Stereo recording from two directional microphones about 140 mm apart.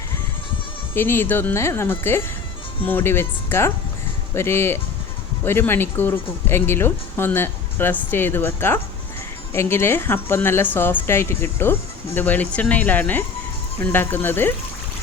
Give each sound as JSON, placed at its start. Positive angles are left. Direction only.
{"t": 0.9, "sound": "a woman's voice", "side_deg": 15}